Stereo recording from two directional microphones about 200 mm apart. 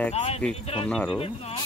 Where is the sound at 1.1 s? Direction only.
30° left (ahead or behind).